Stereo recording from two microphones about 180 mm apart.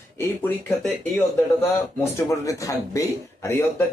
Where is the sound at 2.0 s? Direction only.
15° left (ahead or behind).